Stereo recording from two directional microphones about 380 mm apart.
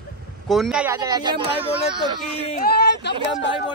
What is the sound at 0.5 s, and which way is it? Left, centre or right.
Speech, centre.